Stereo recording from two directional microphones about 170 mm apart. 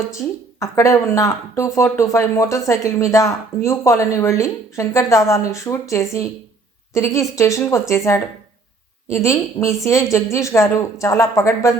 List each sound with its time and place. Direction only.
0.2 s speech: 5° left (ahead or behind)